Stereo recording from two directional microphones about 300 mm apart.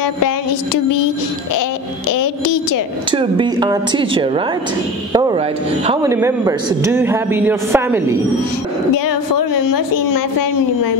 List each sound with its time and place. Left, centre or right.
2.1 s a woman's voice: left
3.1 s a man's voice: centre
8.9 s a woman's voice: left